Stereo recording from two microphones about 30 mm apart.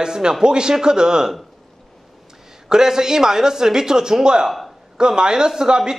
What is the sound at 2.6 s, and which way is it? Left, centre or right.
A man's voice, right.